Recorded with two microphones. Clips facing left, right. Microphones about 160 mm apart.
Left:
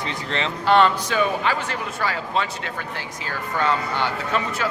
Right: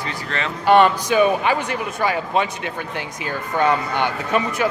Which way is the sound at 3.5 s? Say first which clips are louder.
Right 4 dB; 15° right (ahead or behind).